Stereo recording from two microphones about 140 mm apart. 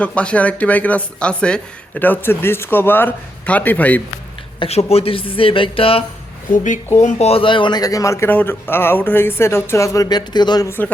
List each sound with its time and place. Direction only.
0.0 s speech: 10° left (ahead or behind)
4.6 s speech: 45° left (ahead or behind)
7.0 s a man's voice: 55° left (ahead or behind); by 10.7 s 30° left (ahead or behind)
10.7 s speech: 15° left (ahead or behind)